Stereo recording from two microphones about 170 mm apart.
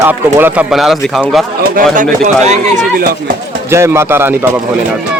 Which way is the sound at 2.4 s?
45° right (ahead or behind).